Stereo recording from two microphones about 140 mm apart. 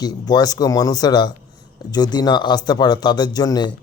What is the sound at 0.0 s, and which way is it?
Speech, 30° left (ahead or behind).